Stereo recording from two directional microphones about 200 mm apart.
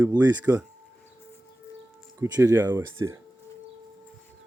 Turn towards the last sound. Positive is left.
turn(degrees=-15)  # may be behind; listen again after turning